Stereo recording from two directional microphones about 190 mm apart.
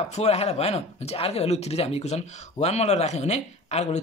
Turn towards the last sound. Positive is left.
turn(degrees=35)  # may be behind; listen again after turning